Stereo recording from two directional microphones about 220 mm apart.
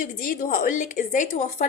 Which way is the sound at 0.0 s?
35° left (ahead or behind).